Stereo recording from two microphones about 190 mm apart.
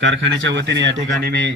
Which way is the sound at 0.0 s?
75° right (ahead or behind).